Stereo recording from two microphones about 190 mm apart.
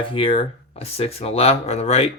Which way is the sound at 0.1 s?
30° left (ahead or behind).